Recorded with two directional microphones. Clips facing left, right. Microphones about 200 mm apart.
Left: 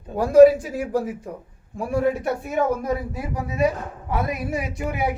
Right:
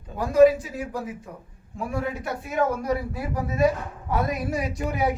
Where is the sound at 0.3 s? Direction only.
45° left (ahead or behind).